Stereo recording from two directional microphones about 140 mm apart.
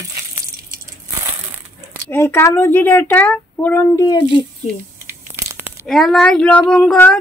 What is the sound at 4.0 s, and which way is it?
Speech, 30° left (ahead or behind).